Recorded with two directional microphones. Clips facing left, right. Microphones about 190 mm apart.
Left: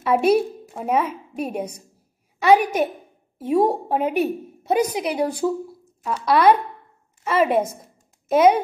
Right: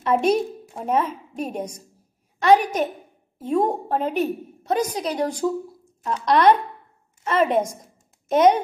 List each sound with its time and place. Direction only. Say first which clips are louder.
0.0 s a woman's voice: left 2 dB; 5° left (ahead or behind)